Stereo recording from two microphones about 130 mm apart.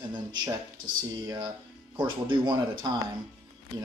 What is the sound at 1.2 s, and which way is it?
Speech, 30° right (ahead or behind).